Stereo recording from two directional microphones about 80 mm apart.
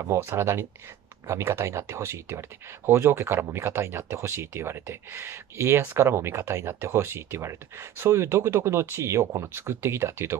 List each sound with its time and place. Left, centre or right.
0.0 s speech: right